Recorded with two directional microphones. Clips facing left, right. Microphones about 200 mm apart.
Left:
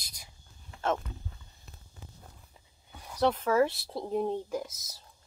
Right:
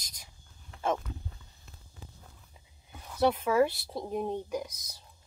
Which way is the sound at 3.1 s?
10° right (ahead or behind).